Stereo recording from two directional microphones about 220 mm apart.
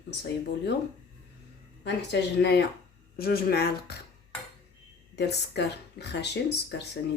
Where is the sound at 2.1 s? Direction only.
50° left (ahead or behind).